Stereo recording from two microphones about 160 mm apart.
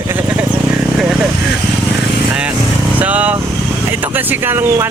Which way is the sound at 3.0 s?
10° right (ahead or behind).